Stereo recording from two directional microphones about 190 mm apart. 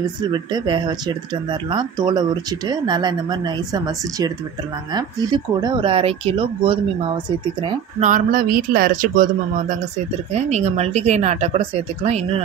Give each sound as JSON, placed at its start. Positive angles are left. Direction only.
{"t": 0.3, "sound": "speech", "side_deg": -25}
{"t": 8.0, "sound": "speech", "side_deg": -45}
{"t": 10.3, "sound": "speech", "side_deg": -35}